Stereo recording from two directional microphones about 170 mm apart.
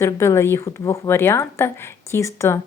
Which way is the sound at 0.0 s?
15° left (ahead or behind).